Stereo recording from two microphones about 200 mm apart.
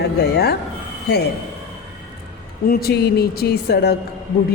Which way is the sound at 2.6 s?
50° left (ahead or behind).